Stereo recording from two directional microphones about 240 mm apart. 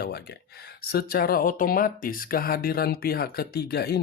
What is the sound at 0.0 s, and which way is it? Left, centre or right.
Speech, left.